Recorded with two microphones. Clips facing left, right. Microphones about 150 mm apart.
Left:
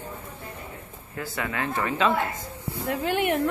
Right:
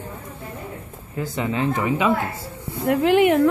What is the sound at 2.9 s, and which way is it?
Speech, 85° right.